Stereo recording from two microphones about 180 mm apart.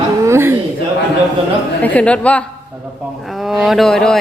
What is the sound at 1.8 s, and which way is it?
A woman's voice, 10° left (ahead or behind).